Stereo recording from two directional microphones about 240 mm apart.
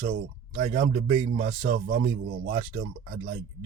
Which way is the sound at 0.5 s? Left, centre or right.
Right.